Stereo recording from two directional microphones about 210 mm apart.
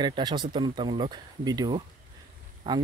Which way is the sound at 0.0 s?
20° right (ahead or behind).